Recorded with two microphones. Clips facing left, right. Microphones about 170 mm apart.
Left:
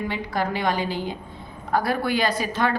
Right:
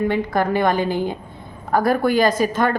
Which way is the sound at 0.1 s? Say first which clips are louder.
Right 7 dB; 50° right (ahead or behind).